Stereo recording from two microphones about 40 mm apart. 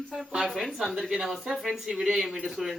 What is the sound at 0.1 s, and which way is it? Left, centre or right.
Speech, centre.